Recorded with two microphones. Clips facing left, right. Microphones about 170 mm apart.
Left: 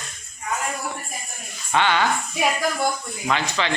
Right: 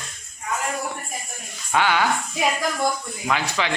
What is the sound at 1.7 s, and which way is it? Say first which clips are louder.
Speech: even; 10° right (ahead or behind).